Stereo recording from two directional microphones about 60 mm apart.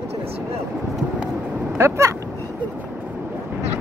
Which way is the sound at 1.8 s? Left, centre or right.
Right.